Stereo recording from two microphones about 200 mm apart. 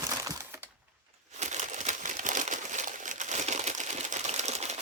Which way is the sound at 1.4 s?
35° right (ahead or behind).